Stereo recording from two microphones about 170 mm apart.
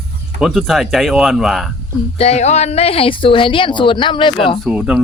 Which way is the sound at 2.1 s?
40° left (ahead or behind).